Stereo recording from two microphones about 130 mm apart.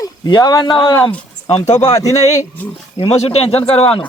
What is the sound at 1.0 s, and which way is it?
Speech, 15° left (ahead or behind).